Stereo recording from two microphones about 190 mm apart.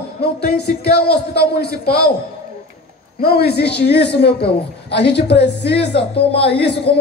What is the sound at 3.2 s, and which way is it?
A man's voice, 55° left (ahead or behind).